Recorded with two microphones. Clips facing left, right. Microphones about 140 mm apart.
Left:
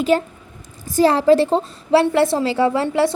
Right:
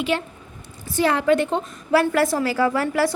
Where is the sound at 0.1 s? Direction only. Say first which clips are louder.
Left 7 dB; 40° left (ahead or behind).